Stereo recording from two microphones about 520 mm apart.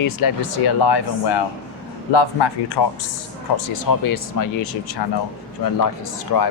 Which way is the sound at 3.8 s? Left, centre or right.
Left.